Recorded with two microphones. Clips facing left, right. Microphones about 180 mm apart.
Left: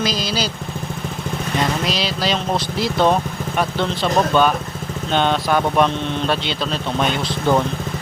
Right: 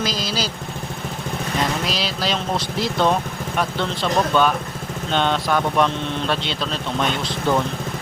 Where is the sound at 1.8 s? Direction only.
Centre (ahead or behind).